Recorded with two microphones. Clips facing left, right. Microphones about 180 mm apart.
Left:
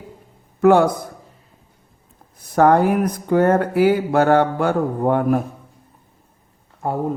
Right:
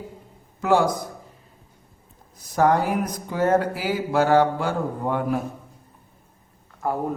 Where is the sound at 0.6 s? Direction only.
60° left (ahead or behind).